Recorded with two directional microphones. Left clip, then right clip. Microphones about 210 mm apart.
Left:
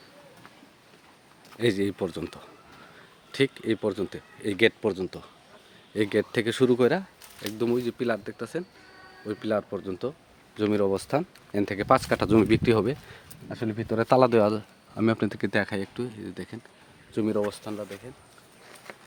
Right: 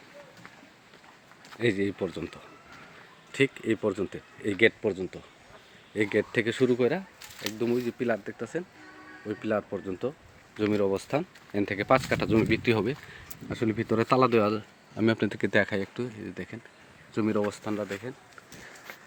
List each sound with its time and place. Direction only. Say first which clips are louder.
1.5 s speech: left 2 dB; 15° left (ahead or behind)
6.6 s speech: left 4 dB; 25° left (ahead or behind)
7.6 s speech: left 2 dB; 10° left (ahead or behind)
13.6 s speech: right 2 dB; 10° right (ahead or behind)
14.0 s speech: left 4 dB; 10° left (ahead or behind)
17.2 s speech: left 1 dB; 15° right (ahead or behind)
17.6 s speech: right 3 dB; 25° right (ahead or behind)